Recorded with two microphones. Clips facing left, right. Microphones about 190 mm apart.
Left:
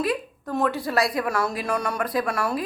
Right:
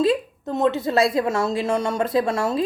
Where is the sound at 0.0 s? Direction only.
25° right (ahead or behind).